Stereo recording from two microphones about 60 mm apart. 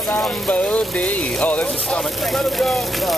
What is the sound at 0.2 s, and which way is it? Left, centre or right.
Music, left.